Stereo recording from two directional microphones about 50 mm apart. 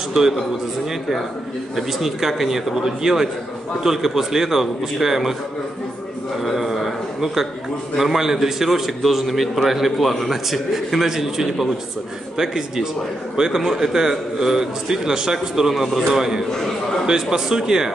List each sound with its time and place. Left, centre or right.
1.8 s a man's voice: centre
6.4 s a man's voice: centre